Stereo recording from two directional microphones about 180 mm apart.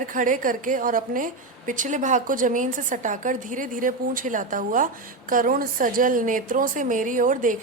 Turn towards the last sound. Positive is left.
turn(degrees=-45)  # may be behind; listen again after turning